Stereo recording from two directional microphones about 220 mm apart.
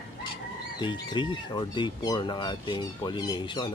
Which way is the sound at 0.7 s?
20° left (ahead or behind).